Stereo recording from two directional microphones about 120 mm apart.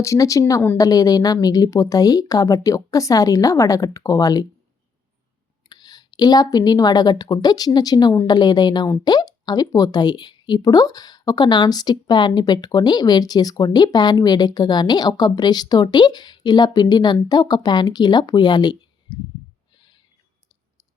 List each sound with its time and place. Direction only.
0.0 s a woman's voice: 25° left (ahead or behind)
5.6 s a woman's voice: 35° left (ahead or behind)